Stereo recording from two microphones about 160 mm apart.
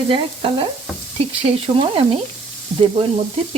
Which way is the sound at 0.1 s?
35° right (ahead or behind).